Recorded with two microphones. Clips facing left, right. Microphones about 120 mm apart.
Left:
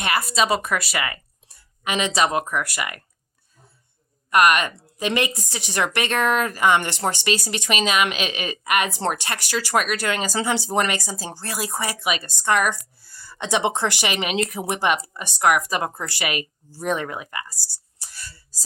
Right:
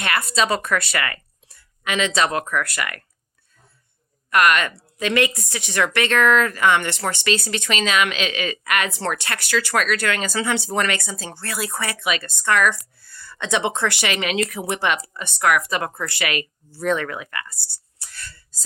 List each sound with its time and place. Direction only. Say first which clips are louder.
0.2 s speech: right 1 dB; 10° left (ahead or behind)
4.3 s a woman's voice: even; 20° left (ahead or behind)
18.0 s whispering: right 1 dB; 15° left (ahead or behind)